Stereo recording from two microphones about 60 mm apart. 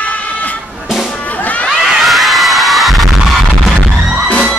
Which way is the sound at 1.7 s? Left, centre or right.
Centre.